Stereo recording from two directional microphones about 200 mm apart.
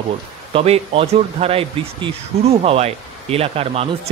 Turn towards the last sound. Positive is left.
turn(degrees=-30)  # may be behind; listen again after turning